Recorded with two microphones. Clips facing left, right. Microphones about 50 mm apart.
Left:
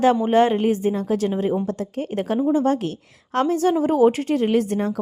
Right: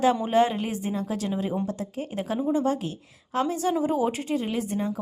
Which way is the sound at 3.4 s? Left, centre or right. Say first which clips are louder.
Left 6 dB; left.